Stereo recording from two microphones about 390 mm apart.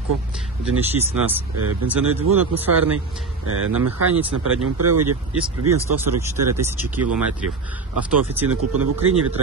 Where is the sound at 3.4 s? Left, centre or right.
Right.